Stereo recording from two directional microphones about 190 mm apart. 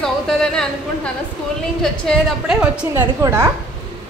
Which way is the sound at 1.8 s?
Centre (ahead or behind).